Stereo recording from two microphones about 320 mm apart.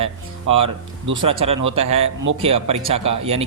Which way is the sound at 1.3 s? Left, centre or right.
Centre.